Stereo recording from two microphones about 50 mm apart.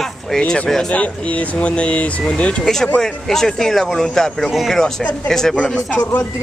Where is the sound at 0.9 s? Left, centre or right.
Left.